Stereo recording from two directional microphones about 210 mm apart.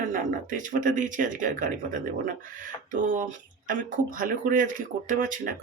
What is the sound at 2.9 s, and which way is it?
A woman's voice, 40° right (ahead or behind).